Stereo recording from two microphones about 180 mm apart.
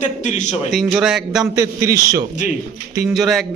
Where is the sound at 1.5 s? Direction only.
20° right (ahead or behind).